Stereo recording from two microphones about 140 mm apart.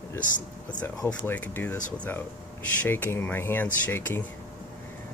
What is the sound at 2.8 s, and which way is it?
Speech, 15° left (ahead or behind).